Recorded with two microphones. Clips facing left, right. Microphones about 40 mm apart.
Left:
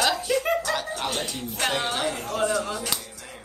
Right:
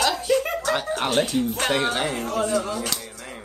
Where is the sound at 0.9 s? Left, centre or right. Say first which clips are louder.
Right 7 dB; right.